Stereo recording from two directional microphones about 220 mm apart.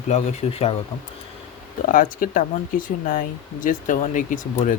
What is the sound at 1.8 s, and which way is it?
Speech, 40° left (ahead or behind).